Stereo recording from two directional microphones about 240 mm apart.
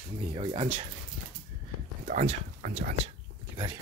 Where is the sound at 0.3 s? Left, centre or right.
Right.